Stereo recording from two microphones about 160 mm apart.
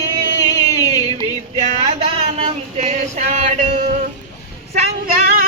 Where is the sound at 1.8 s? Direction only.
35° right (ahead or behind).